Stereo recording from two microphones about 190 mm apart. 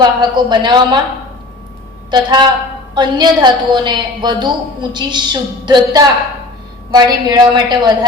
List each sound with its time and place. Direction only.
0.0 s a woman's voice: 25° right (ahead or behind)
2.0 s a woman's voice: 25° right (ahead or behind)